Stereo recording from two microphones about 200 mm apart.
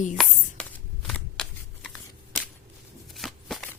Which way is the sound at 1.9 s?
Centre (ahead or behind).